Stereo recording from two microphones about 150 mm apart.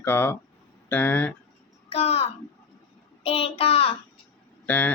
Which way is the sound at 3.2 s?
40° left (ahead or behind).